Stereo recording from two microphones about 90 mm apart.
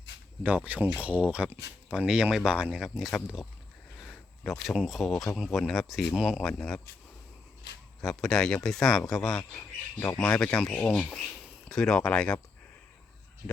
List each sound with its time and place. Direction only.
0.4 s speech: 15° right (ahead or behind); by 6.8 s 10° left (ahead or behind)
8.0 s speech: 5° left (ahead or behind)
10.2 s speech: 15° left (ahead or behind)